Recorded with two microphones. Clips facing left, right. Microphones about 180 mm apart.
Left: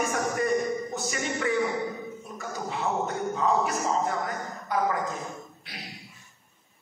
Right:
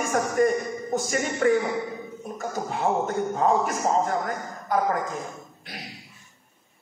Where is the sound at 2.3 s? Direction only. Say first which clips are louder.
Right 4 dB; 50° right (ahead or behind).